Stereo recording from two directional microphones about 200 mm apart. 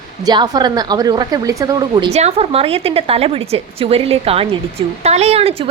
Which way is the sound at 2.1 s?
30° right (ahead or behind).